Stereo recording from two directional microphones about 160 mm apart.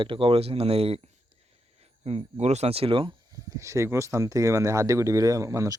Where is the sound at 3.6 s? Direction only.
20° right (ahead or behind).